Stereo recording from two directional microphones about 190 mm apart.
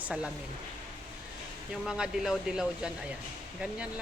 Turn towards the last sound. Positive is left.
turn(degrees=-5)  # may be behind; listen again after turning